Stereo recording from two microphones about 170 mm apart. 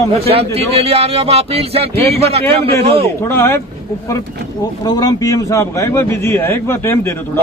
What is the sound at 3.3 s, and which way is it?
Speech, 15° left (ahead or behind).